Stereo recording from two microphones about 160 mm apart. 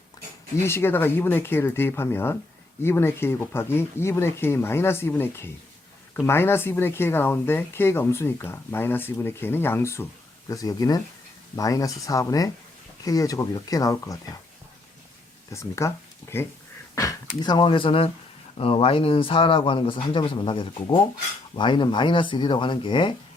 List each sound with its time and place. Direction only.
0.5 s speech: 15° left (ahead or behind)
15.5 s speech: 20° left (ahead or behind)